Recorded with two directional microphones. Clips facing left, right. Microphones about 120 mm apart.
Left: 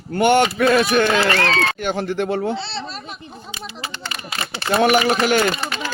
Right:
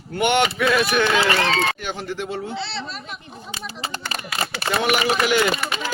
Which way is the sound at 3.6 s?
40° right (ahead or behind).